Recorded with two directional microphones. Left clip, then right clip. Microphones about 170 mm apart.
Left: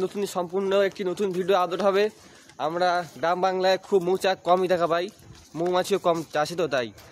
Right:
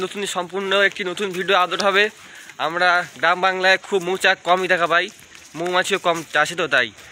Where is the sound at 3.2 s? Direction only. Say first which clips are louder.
Right 4 dB; 10° left (ahead or behind).